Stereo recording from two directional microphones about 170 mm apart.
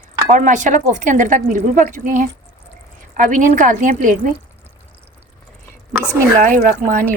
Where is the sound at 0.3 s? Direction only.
45° right (ahead or behind).